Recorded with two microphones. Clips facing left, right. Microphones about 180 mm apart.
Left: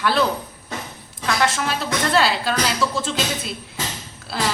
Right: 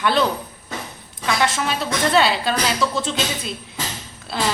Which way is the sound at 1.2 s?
Centre (ahead or behind).